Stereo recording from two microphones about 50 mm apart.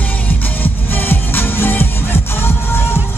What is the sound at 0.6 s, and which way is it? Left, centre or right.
Music, left.